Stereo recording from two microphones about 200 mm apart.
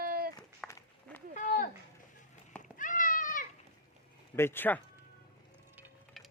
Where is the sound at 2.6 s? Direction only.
40° left (ahead or behind).